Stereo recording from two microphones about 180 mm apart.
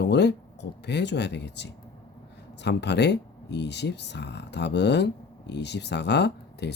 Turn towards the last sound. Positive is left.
turn(degrees=70)  # may be behind; listen again after turning